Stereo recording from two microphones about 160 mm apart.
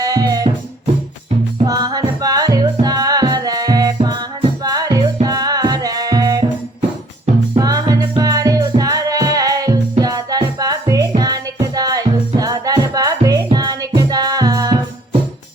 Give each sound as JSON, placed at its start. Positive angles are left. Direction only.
{"t": 0.0, "sound": "music", "side_deg": -20}
{"t": 1.6, "sound": "music", "side_deg": -25}
{"t": 7.5, "sound": "music", "side_deg": -25}